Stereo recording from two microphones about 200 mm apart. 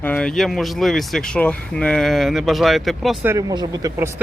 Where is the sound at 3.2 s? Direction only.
20° right (ahead or behind).